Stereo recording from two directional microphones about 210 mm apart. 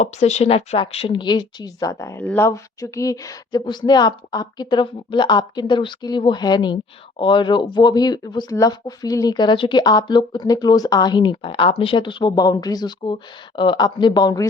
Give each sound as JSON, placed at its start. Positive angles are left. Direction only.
{"t": 0.0, "sound": "speech", "side_deg": 30}